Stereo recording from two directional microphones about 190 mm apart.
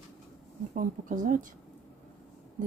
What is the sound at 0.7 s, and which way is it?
Speech, 45° right (ahead or behind).